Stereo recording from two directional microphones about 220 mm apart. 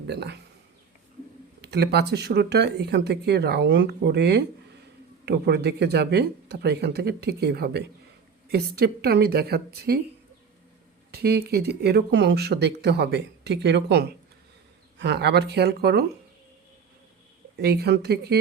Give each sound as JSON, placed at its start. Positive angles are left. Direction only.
{"t": 0.1, "sound": "speech", "side_deg": -50}
{"t": 1.6, "sound": "speech", "side_deg": -50}
{"t": 11.1, "sound": "speech", "side_deg": -45}
{"t": 17.6, "sound": "speech", "side_deg": -45}